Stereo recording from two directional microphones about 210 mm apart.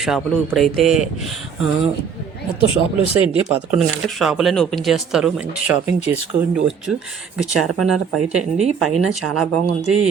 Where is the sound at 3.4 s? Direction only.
5° right (ahead or behind).